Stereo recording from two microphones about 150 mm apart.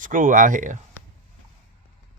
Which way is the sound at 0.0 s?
60° right (ahead or behind).